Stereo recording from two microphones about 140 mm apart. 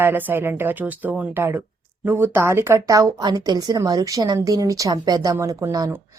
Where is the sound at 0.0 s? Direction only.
15° right (ahead or behind).